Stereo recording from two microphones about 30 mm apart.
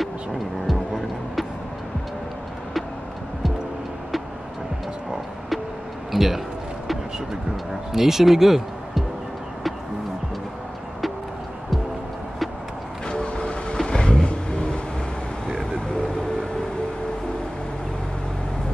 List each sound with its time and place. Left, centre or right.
0.7 s music: centre
6.1 s a man's voice: centre
7.9 s speech: centre
13.1 s vehicle: left